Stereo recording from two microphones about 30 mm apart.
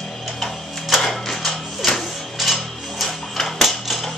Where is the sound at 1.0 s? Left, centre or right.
Centre.